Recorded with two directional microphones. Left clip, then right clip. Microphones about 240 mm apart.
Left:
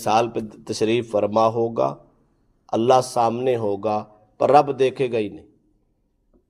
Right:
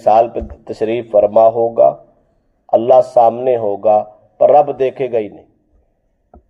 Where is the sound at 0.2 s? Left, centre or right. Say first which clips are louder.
Right 9 dB; left.